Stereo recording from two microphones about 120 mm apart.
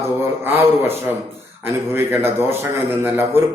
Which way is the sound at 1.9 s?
20° right (ahead or behind).